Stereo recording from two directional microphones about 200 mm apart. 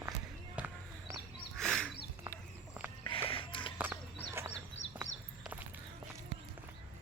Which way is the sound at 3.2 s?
25° left (ahead or behind).